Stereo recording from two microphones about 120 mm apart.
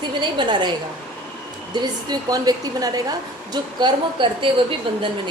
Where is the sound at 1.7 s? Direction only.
35° right (ahead or behind).